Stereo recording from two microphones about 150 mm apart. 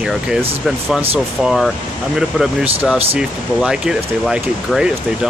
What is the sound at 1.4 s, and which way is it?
Speech, centre (ahead or behind).